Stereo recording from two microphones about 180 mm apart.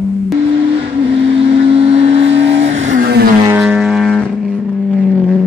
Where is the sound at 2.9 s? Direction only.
65° right (ahead or behind).